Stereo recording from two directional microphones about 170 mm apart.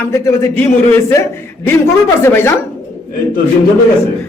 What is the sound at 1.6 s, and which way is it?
Speech, 15° left (ahead or behind).